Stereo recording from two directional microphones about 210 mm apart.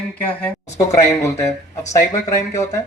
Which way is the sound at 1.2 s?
15° left (ahead or behind).